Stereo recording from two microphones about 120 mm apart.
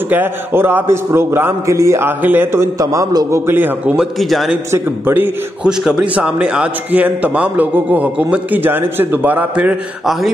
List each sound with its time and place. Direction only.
0.1 s a man's voice: 15° right (ahead or behind); by 4.6 s centre (ahead or behind)
4.6 s a man's voice: 20° right (ahead or behind)